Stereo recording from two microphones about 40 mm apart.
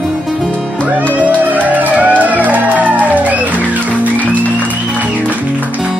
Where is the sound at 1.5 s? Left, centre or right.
Right.